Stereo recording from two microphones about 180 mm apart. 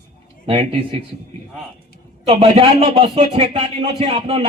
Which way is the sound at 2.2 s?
35° right (ahead or behind).